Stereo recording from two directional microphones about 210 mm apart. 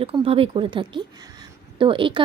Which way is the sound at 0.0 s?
25° right (ahead or behind).